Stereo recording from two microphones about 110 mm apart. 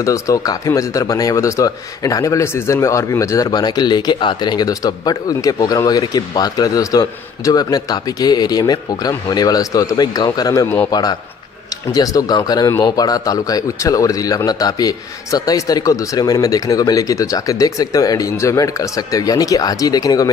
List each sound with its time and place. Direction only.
0.0 s speech: 30° left (ahead or behind)
3.4 s speech: 40° left (ahead or behind)